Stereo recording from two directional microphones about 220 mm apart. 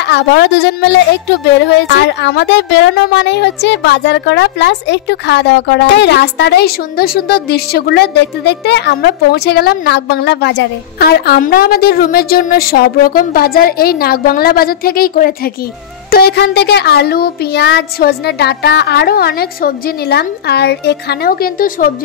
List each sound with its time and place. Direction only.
0.0 s speech: 50° left (ahead or behind)